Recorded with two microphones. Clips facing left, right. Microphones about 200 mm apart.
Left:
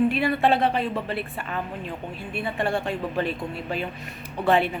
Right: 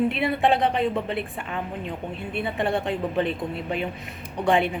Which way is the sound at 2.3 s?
20° right (ahead or behind).